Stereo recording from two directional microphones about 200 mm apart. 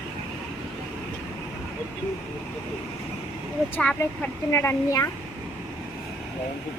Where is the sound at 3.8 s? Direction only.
5° left (ahead or behind).